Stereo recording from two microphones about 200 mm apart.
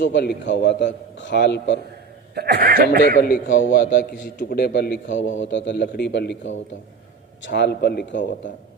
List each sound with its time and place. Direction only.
0.0 s a man's voice: 60° left (ahead or behind)
2.3 s speech: 50° right (ahead or behind)
3.2 s a man's voice: 40° left (ahead or behind); by 8.3 s 65° left (ahead or behind)